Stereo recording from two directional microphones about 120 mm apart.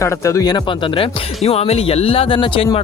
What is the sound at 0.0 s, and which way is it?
Speech, 25° left (ahead or behind).